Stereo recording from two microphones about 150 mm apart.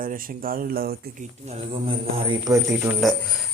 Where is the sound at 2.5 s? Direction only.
20° right (ahead or behind).